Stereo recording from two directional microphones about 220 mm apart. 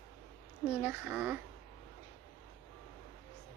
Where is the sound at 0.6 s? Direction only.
5° right (ahead or behind).